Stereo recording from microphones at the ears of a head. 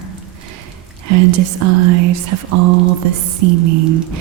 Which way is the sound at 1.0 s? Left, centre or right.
Right.